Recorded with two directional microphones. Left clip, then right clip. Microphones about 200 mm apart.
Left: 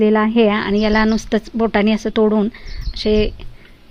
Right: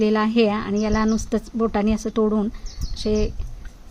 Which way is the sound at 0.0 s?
25° left (ahead or behind).